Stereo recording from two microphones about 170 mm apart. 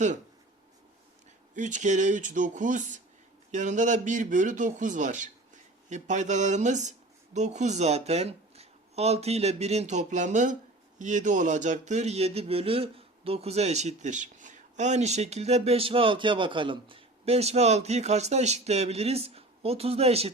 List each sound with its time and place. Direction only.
1.5 s speech: 45° right (ahead or behind)